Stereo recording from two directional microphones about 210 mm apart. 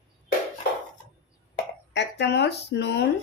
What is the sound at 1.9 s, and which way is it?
Speech, 55° left (ahead or behind).